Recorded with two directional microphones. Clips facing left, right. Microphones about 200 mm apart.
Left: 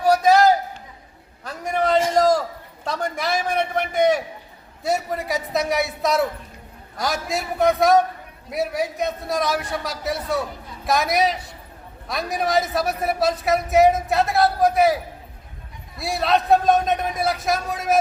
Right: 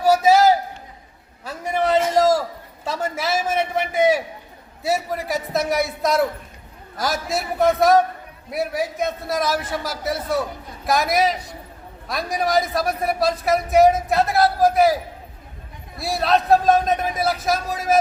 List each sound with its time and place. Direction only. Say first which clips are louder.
0.0 s a sound: right 1 dB; 5° right (ahead or behind)
4.8 s a man's voice: even; 5° right (ahead or behind)
16.0 s a man's voice: right 1 dB; centre (ahead or behind)